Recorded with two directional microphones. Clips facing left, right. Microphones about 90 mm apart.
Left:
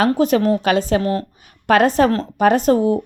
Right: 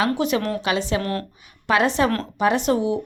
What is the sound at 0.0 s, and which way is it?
A woman's voice, 45° left (ahead or behind).